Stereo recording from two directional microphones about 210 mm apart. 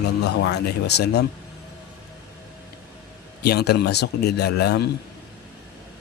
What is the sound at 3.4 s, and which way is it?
A man's voice, 50° left (ahead or behind).